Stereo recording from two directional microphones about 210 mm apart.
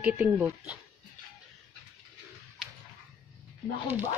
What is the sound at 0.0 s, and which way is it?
Speech, 5° right (ahead or behind).